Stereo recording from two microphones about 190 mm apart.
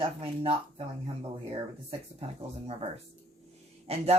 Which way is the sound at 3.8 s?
35° right (ahead or behind).